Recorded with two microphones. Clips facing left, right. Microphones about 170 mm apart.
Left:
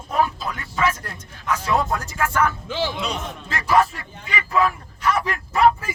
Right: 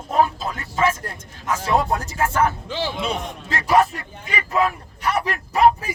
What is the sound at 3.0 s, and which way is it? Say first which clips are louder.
Speech: right 2 dB; 50° right (ahead or behind).